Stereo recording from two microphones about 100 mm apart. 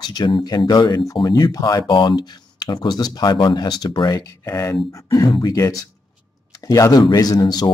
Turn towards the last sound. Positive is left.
turn(degrees=45)  # may be behind; listen again after turning